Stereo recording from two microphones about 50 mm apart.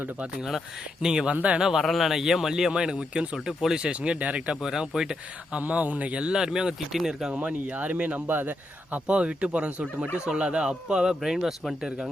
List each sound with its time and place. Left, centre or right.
1.0 s speech: centre
1.3 s speech: right
1.8 s speech: centre
3.8 s speech: right
4.6 s speech: centre
5.5 s speech: right; by 7.3 s centre
7.3 s speech: right
8.3 s a man's voice: right
9.0 s speech: right; by 12.1 s centre